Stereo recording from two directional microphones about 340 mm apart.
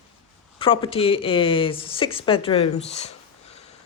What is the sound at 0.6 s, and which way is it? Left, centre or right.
Speech, centre.